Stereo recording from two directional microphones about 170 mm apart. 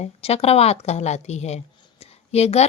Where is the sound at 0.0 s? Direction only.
35° left (ahead or behind).